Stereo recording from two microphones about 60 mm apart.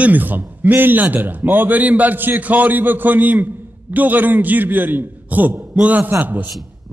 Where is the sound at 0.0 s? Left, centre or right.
Right.